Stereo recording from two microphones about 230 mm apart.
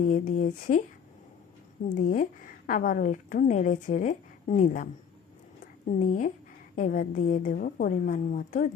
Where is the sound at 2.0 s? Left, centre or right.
Left.